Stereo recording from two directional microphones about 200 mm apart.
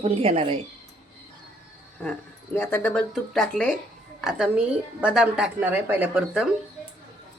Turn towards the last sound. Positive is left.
turn(degrees=-5)  # may be behind; listen again after turning